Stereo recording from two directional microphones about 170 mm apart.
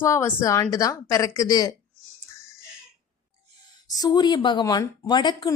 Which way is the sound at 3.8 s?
20° left (ahead or behind).